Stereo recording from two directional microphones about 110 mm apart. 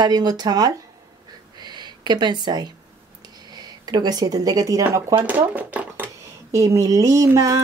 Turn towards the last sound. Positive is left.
turn(degrees=-30)  # may be behind; listen again after turning